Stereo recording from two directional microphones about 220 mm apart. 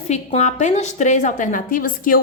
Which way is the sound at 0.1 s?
30° left (ahead or behind).